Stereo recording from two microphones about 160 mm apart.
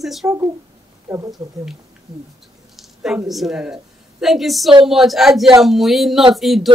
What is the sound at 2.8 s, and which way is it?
A woman's voice, centre (ahead or behind).